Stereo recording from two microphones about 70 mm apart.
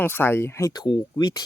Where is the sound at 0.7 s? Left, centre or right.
Left.